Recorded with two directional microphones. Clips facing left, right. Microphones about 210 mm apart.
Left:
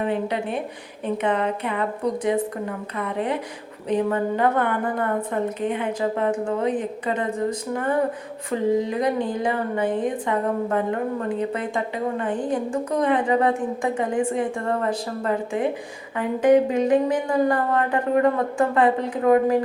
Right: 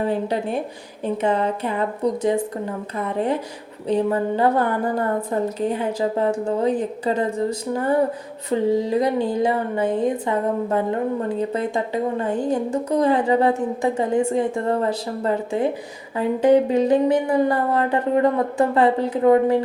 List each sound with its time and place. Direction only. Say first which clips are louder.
0.0 s a woman's voice: right 2 dB; 35° right (ahead or behind)
3.8 s a woman's voice: right 2 dB; 30° right (ahead or behind)